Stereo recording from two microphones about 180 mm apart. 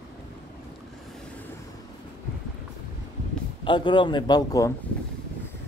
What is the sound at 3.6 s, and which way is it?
Speech, 25° left (ahead or behind).